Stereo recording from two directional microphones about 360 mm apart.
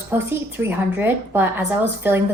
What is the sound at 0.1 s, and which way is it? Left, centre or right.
A woman's voice, centre.